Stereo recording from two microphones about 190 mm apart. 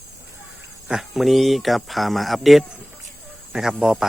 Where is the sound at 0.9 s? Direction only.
Centre (ahead or behind).